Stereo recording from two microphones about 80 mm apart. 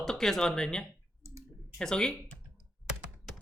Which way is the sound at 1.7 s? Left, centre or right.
Centre.